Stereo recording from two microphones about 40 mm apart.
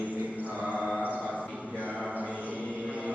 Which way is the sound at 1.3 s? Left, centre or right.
Left.